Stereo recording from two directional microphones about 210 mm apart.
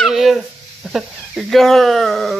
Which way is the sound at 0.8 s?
Centre (ahead or behind).